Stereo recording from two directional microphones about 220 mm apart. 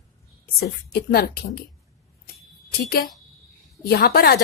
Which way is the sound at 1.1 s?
45° left (ahead or behind).